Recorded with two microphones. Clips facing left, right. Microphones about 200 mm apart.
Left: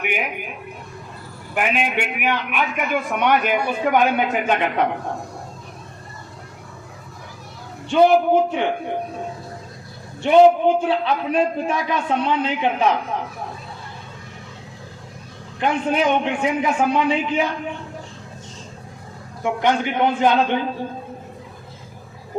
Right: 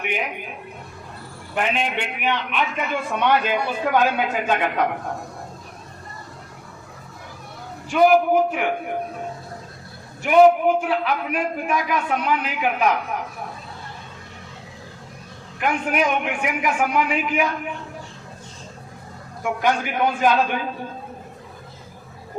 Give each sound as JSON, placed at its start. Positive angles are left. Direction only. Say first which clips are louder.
{"t": 1.5, "sound": "a man's voice", "louder": "left 2 dB", "side_deg": 10}
{"t": 7.9, "sound": "a man's voice", "louder": "left 1 dB", "side_deg": 25}
{"t": 10.2, "sound": "a man's voice", "louder": "left 1 dB", "side_deg": 25}
{"t": 15.6, "sound": "a man's voice", "louder": "left 2 dB", "side_deg": 30}
{"t": 19.4, "sound": "a man's voice", "louder": "left 2 dB", "side_deg": 20}